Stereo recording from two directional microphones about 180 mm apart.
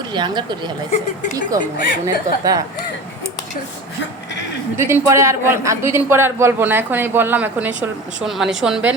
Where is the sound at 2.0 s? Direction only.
20° right (ahead or behind).